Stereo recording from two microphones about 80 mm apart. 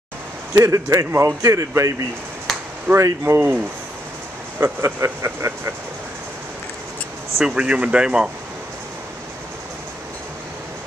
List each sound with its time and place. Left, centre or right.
0.6 s speech: right
4.6 s speech: right
7.3 s speech: centre